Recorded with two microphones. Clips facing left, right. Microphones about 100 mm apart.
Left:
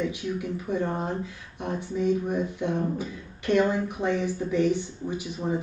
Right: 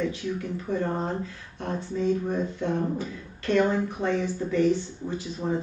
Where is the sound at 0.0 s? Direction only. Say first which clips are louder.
Even; 15° left (ahead or behind).